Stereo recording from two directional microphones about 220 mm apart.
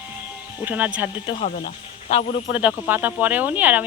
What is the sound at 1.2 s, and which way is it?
Speech, 25° left (ahead or behind).